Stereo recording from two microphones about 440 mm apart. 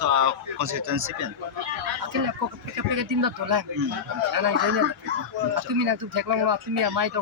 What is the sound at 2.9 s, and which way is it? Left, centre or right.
Speech, right.